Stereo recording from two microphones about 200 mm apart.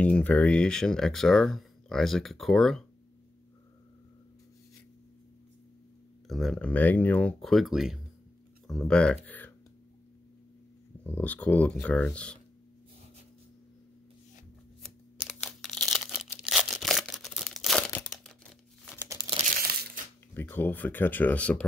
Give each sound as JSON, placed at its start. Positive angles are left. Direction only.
{"t": 0.0, "sound": "speech", "side_deg": 5}
{"t": 6.2, "sound": "speech", "side_deg": 0}
{"t": 11.1, "sound": "speech", "side_deg": 10}
{"t": 14.8, "sound": "tearing", "side_deg": 0}
{"t": 19.0, "sound": "crumpling", "side_deg": -20}
{"t": 20.3, "sound": "speech", "side_deg": 10}